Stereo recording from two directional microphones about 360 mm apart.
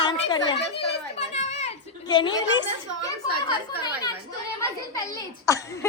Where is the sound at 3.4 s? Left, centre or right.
Centre.